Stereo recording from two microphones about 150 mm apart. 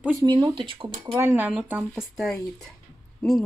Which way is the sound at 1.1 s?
15° right (ahead or behind).